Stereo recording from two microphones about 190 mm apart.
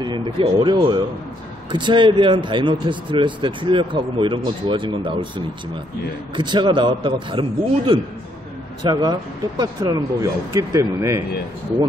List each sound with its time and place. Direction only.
0.0 s speech: 25° right (ahead or behind)